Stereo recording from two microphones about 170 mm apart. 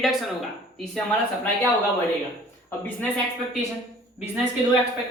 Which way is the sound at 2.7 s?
10° left (ahead or behind).